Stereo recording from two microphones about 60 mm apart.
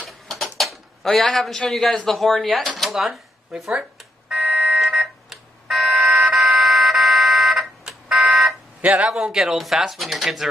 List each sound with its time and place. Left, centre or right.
0.3 s a sound: centre
1.7 s speech: centre
4.4 s fire alarm: centre
4.7 s fire alarm: centre
8.8 s a man's voice: right
9.1 s speech: centre